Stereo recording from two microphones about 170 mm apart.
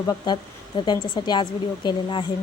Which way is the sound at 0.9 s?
25° left (ahead or behind).